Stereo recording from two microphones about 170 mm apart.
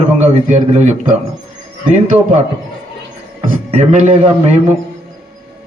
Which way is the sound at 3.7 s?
35° right (ahead or behind).